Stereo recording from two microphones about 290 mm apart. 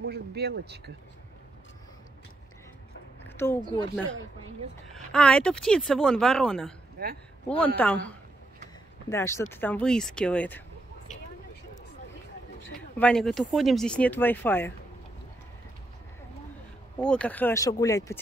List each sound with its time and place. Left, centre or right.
0.0 s speech: right
3.3 s speech: centre
7.0 s speech: right
7.4 s speech: centre
12.9 s speech: centre
17.0 s speech: centre